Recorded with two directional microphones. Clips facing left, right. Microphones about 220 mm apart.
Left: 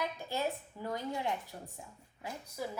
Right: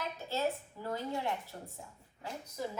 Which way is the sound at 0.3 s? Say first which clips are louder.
Right 1 dB; 15° left (ahead or behind).